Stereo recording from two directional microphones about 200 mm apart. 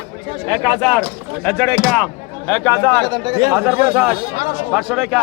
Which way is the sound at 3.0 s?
20° right (ahead or behind).